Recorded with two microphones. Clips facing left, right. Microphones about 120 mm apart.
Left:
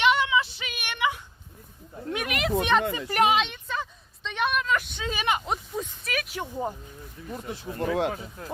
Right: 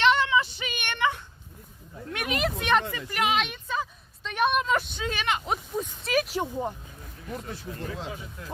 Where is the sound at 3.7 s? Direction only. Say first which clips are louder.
Right 1 dB; 10° right (ahead or behind).